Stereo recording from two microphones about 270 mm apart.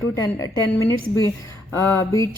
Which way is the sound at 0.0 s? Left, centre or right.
Centre.